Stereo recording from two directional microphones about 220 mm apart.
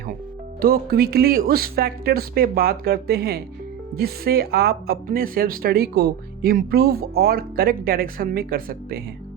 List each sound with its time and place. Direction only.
0.6 s speech: 45° right (ahead or behind)